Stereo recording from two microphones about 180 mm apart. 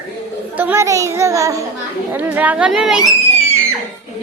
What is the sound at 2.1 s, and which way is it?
Speech, 10° right (ahead or behind).